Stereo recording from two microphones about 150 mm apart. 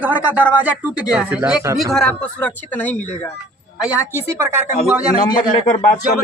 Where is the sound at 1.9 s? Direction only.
5° left (ahead or behind).